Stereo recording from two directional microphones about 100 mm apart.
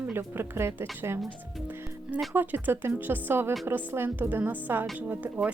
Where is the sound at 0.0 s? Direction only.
20° right (ahead or behind).